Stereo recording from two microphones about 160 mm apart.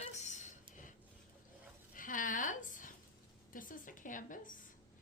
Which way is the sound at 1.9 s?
55° left (ahead or behind).